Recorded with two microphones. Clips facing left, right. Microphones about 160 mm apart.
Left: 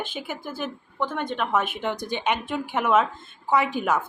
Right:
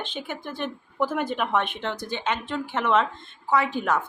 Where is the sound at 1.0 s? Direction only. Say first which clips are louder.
Right 2 dB; 5° right (ahead or behind); by 4.0 s 10° left (ahead or behind).